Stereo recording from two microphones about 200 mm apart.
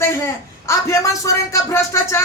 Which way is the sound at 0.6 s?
15° left (ahead or behind).